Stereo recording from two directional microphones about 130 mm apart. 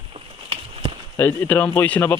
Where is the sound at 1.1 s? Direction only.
20° left (ahead or behind).